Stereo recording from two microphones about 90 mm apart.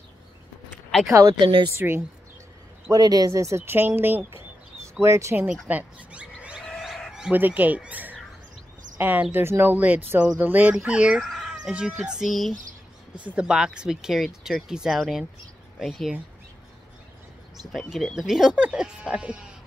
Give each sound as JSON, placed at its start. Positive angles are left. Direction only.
{"t": 1.4, "sound": "a woman's voice", "side_deg": -65}
{"t": 1.8, "sound": "speech", "side_deg": -25}
{"t": 2.9, "sound": "speech", "side_deg": -45}
{"t": 5.0, "sound": "speech", "side_deg": -35}
{"t": 5.7, "sound": "bird", "side_deg": -15}
{"t": 7.3, "sound": "speech", "side_deg": -20}
{"t": 13.1, "sound": "speech", "side_deg": -15}
{"t": 17.7, "sound": "speech", "side_deg": 0}